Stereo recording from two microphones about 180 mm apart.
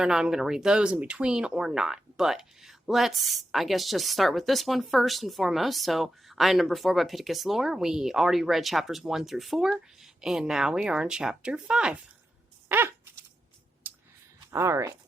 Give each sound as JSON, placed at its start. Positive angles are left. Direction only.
{"t": 0.0, "sound": "speech", "side_deg": -5}
{"t": 12.6, "sound": "a sound", "side_deg": -10}
{"t": 14.5, "sound": "speech", "side_deg": -15}